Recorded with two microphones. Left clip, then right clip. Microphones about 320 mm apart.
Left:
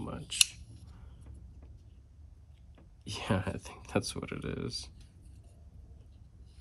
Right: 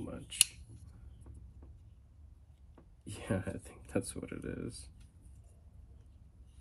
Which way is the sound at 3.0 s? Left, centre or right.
Centre.